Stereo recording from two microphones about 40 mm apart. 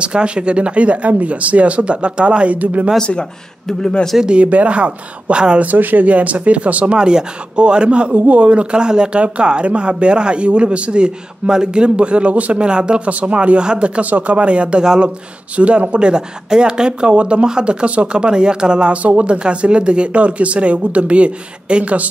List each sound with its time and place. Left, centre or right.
0.0 s speech: right
3.0 s speech: left
4.2 s speech: right
4.5 s speech: right
5.6 s speech: right
7.0 s speech: right
12.5 s speech: right
14.9 s speech: centre
15.5 s speech: right